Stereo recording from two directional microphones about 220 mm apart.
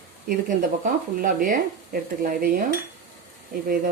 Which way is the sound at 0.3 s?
40° right (ahead or behind).